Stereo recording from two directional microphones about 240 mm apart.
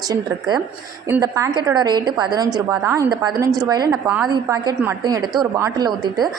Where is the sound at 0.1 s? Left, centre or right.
Centre.